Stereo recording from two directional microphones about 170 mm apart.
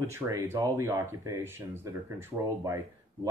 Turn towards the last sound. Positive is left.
turn(degrees=-15)  # may be behind; listen again after turning